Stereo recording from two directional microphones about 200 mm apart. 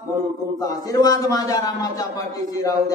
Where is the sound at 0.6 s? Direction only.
20° left (ahead or behind).